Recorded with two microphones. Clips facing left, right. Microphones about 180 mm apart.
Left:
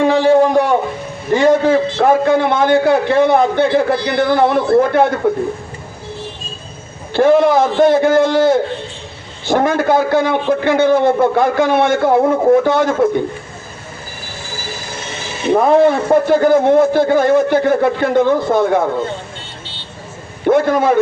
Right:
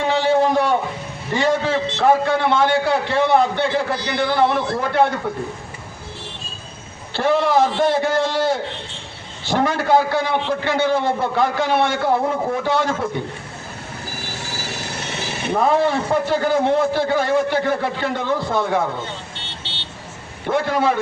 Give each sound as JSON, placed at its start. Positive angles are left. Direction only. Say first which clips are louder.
{"t": 0.0, "sound": "a sound", "louder": "left 6 dB", "side_deg": 45}
{"t": 1.3, "sound": "a man's voice", "louder": "left 8 dB", "side_deg": 45}
{"t": 7.1, "sound": "a man's voice", "louder": "left 7 dB", "side_deg": 50}
{"t": 14.2, "sound": "a sound", "louder": "left 1 dB", "side_deg": -75}
{"t": 15.5, "sound": "a man's voice", "louder": "left 7 dB", "side_deg": 50}
{"t": 19.6, "sound": "vehicle", "louder": "left 1 dB", "side_deg": -80}
{"t": 20.5, "sound": "a man's voice", "louder": "left 7 dB", "side_deg": 50}